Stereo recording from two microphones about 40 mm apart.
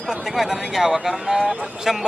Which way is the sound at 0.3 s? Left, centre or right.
Centre.